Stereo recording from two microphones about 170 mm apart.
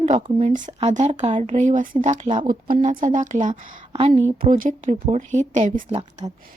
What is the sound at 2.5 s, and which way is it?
Speech, 55° right (ahead or behind).